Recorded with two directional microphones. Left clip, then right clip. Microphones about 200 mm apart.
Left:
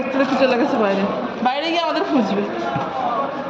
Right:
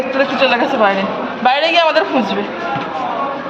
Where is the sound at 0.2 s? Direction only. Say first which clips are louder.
Right 3 dB; 5° left (ahead or behind).